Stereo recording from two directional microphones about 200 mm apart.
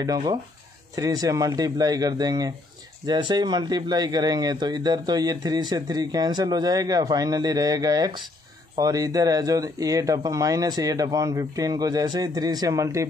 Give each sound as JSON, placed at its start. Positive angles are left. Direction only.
{"t": 0.0, "sound": "speech", "side_deg": -20}